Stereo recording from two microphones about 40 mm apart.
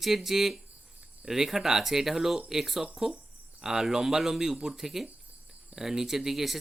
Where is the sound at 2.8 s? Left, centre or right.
Right.